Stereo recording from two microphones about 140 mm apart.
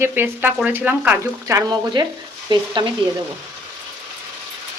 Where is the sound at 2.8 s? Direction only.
30° right (ahead or behind).